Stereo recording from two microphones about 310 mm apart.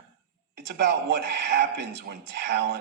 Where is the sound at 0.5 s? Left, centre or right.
Right.